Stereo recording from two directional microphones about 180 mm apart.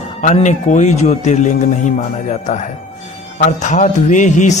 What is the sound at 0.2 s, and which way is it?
A man's voice, 45° left (ahead or behind).